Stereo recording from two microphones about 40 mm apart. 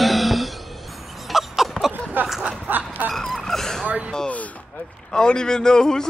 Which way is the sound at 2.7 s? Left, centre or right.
Right.